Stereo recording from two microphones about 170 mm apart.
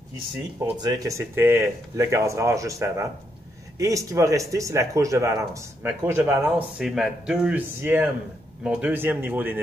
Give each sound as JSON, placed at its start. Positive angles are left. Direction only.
{"t": 0.7, "sound": "speech", "side_deg": -25}